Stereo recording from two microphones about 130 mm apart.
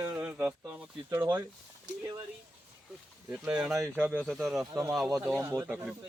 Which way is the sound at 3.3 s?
10° right (ahead or behind).